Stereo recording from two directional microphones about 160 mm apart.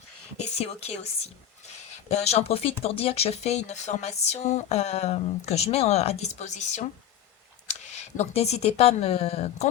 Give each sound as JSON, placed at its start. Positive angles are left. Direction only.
{"t": 0.3, "sound": "speech", "side_deg": 40}